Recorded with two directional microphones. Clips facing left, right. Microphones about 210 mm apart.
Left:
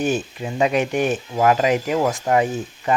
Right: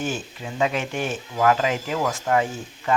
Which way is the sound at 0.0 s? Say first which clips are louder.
Left 7 dB; 15° left (ahead or behind).